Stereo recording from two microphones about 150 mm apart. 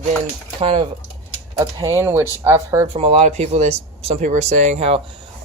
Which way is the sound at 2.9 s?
40° right (ahead or behind).